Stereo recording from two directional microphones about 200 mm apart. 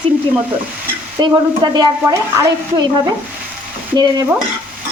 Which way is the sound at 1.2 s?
20° right (ahead or behind).